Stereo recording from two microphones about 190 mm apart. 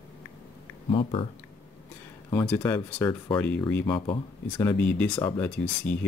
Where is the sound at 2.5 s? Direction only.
10° left (ahead or behind).